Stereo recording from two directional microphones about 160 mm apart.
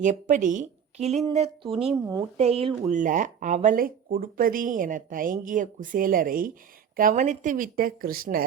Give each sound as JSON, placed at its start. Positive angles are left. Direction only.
{"t": 0.0, "sound": "speech", "side_deg": -50}
{"t": 2.9, "sound": "speech", "side_deg": -55}